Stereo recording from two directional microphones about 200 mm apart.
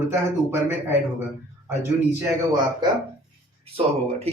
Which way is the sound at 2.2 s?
15° right (ahead or behind).